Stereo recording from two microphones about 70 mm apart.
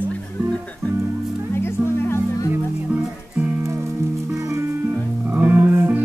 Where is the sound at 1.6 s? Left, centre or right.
Left.